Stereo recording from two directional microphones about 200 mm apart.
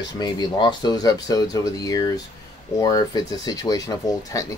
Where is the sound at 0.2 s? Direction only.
20° left (ahead or behind).